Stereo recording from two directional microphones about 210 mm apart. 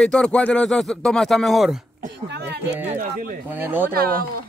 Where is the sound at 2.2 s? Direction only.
55° right (ahead or behind).